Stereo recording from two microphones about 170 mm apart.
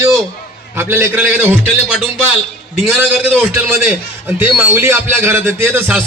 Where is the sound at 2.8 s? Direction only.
5° right (ahead or behind).